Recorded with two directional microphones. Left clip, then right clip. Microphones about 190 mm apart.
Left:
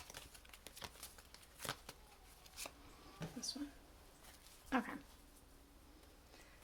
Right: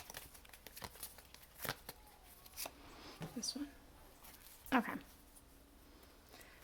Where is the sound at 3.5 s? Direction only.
35° right (ahead or behind).